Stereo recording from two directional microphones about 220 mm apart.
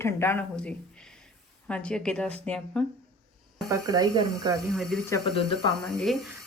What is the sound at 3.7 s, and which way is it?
Speech, 15° right (ahead or behind).